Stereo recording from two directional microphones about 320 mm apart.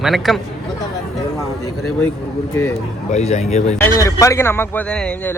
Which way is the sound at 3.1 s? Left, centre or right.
Left.